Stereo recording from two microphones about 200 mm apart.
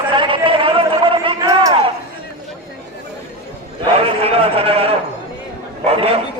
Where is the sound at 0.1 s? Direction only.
25° right (ahead or behind).